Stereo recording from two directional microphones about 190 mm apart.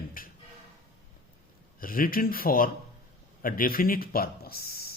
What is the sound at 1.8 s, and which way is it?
Speech, 50° left (ahead or behind).